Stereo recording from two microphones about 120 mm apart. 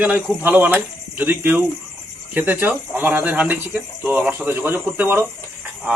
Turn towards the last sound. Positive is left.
turn(degrees=-15)  # may be behind; listen again after turning